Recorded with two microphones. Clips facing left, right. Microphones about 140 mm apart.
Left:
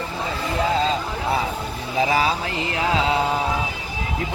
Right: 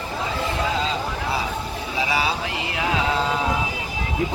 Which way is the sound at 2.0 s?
45° left (ahead or behind).